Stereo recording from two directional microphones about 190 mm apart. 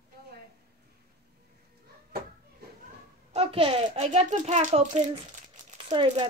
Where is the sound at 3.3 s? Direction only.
30° right (ahead or behind).